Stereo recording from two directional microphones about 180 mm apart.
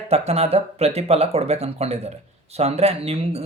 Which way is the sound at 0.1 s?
35° right (ahead or behind).